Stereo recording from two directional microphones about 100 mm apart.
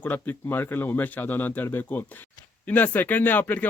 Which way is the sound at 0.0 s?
20° left (ahead or behind).